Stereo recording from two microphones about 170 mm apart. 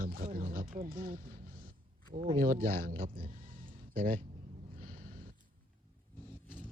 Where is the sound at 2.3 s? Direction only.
55° right (ahead or behind).